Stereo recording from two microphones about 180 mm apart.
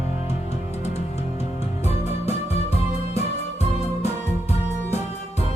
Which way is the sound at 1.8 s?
35° left (ahead or behind).